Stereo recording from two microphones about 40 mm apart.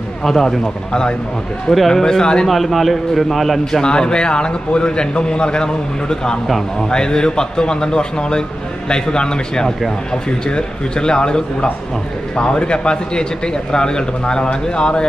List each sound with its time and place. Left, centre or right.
0.2 s speech: centre
2.4 s a man's voice: centre
3.8 s a man's voice: left